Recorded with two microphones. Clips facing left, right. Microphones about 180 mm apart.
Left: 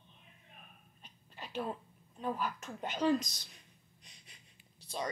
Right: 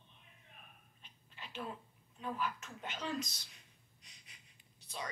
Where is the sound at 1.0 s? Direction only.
40° left (ahead or behind).